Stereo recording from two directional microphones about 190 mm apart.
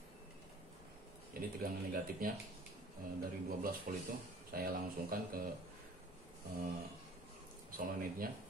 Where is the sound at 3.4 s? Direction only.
50° right (ahead or behind).